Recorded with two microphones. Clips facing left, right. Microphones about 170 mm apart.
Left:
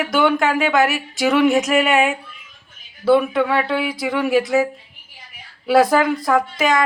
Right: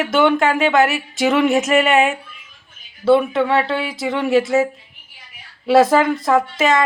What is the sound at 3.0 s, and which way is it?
Speech, 25° right (ahead or behind).